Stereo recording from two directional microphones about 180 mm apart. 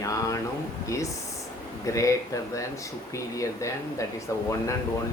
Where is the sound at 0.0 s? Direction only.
15° left (ahead or behind).